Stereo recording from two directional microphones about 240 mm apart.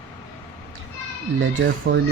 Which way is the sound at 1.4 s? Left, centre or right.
Right.